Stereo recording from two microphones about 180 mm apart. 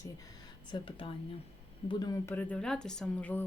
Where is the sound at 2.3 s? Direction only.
5° left (ahead or behind).